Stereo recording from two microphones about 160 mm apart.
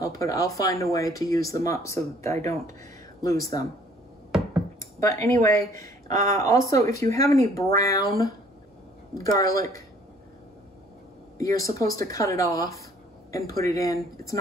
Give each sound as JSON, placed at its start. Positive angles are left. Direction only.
{"t": 0.2, "sound": "speech", "side_deg": 20}
{"t": 4.7, "sound": "speech", "side_deg": 20}
{"t": 8.1, "sound": "speech", "side_deg": -70}
{"t": 9.2, "sound": "speech", "side_deg": 20}
{"t": 11.3, "sound": "speech", "side_deg": 20}